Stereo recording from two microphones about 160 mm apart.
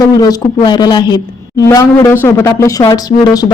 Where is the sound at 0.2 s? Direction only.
25° left (ahead or behind).